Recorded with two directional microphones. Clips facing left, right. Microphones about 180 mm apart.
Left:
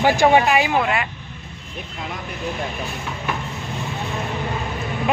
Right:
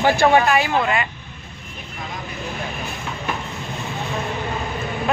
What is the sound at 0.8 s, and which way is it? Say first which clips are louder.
Speech: right 1 dB; 5° left (ahead or behind).